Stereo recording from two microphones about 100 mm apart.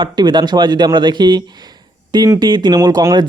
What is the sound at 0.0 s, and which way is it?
Speech, 45° right (ahead or behind).